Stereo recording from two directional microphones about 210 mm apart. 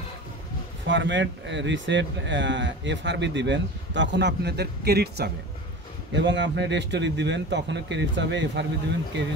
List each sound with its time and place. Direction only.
0.8 s speech: 60° right (ahead or behind)